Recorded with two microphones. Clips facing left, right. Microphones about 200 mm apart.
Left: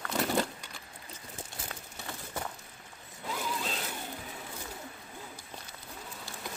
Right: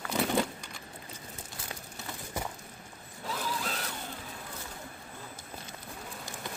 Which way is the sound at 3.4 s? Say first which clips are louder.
Even; 20° left (ahead or behind).